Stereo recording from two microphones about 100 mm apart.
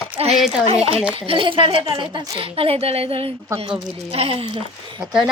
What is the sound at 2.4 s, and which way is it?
A woman's voice, 70° right (ahead or behind).